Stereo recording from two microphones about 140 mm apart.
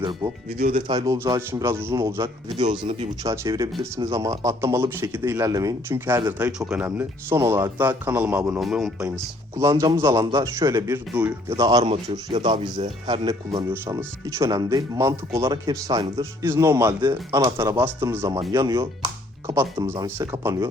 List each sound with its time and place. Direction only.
0.2 s speech: 15° right (ahead or behind)
0.9 s speech: 25° right (ahead or behind)
2.2 s speech: 35° right (ahead or behind)
3.2 s speech: 25° right (ahead or behind); by 9.1 s 5° right (ahead or behind)
9.1 s speech: 20° right (ahead or behind)
12.3 s speech: 45° right (ahead or behind)
13.8 s speech: 20° right (ahead or behind)